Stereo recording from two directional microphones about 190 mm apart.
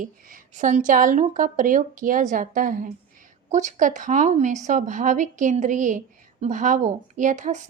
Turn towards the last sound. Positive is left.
turn(degrees=-40)  # may be behind; listen again after turning